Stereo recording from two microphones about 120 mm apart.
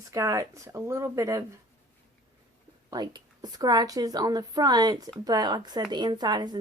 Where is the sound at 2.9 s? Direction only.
35° right (ahead or behind).